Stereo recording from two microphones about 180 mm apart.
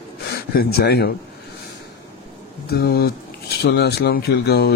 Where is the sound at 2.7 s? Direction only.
60° left (ahead or behind).